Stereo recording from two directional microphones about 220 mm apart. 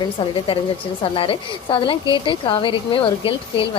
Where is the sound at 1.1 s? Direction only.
25° left (ahead or behind).